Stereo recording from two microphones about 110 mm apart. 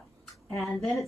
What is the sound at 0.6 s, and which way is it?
Speech, centre (ahead or behind).